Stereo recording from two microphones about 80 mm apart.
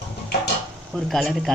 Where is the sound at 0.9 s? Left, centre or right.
Centre.